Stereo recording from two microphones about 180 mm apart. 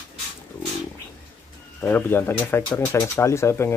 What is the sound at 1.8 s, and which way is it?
Speech, 10° left (ahead or behind).